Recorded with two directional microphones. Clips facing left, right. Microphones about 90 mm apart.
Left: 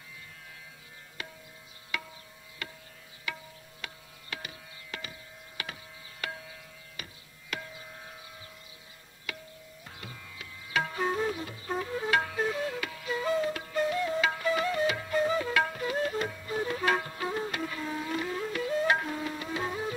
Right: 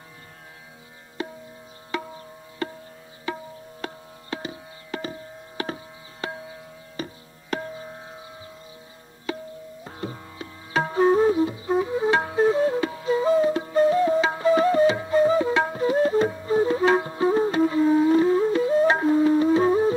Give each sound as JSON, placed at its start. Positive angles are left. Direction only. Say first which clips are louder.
{"t": 1.2, "sound": "music", "louder": "right 12 dB", "side_deg": -30}
{"t": 1.9, "sound": "tabla", "louder": "right 8 dB", "side_deg": -35}
{"t": 3.8, "sound": "music", "louder": "right 10 dB", "side_deg": -30}
{"t": 6.2, "sound": "tabla", "louder": "right 7 dB", "side_deg": -30}
{"t": 9.3, "sound": "music", "louder": "right 11 dB", "side_deg": -30}